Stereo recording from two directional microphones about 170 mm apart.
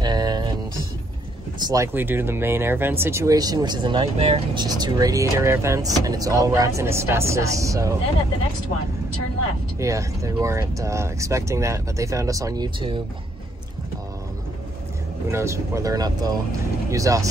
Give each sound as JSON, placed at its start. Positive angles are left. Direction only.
{"t": 0.0, "sound": "a sound", "side_deg": -25}
{"t": 1.7, "sound": "speech", "side_deg": -15}
{"t": 9.8, "sound": "speech", "side_deg": -20}
{"t": 15.2, "sound": "speech", "side_deg": -15}